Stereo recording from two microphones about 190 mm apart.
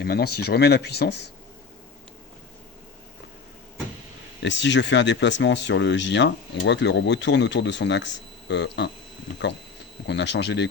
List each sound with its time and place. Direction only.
0.0 s speech: 55° left (ahead or behind)
4.4 s speech: 70° left (ahead or behind)
10.1 s speech: 65° left (ahead or behind)